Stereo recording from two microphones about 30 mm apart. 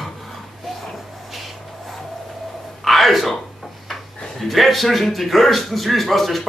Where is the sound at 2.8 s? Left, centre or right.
Centre.